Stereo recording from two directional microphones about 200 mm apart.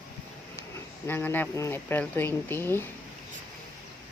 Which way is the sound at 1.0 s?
10° left (ahead or behind).